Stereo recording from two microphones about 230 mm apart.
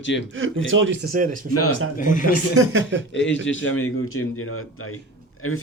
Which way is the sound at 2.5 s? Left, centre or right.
Right.